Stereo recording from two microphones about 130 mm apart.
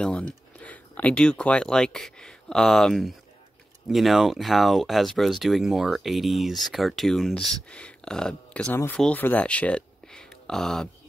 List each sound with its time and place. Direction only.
0.0 s speech: 10° left (ahead or behind)